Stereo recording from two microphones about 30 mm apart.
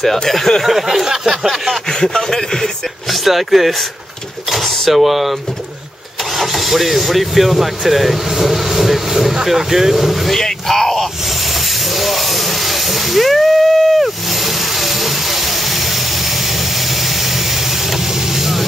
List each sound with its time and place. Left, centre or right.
0.7 s speech: centre
2.1 s speech: centre
3.1 s speech: centre
6.3 s speech: centre
10.3 s speech: centre
12.0 s hiss: centre
18.3 s vehicle: centre